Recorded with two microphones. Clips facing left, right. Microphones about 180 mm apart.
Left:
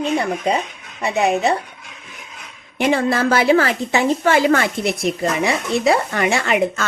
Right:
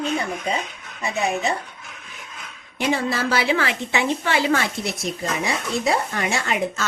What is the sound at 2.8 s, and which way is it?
A woman's voice, 55° left (ahead or behind).